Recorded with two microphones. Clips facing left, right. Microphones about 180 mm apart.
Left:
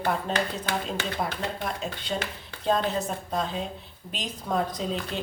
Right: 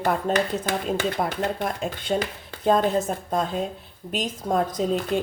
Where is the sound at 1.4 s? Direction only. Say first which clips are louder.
Right 5 dB; 50° right (ahead or behind).